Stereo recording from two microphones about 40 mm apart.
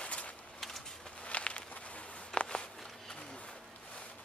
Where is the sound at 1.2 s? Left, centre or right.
Left.